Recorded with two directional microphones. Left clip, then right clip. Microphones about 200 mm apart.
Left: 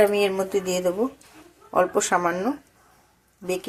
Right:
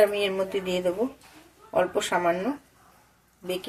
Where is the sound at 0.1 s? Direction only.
25° left (ahead or behind).